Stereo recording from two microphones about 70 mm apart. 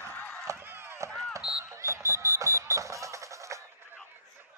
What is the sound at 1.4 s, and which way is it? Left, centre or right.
Music, centre.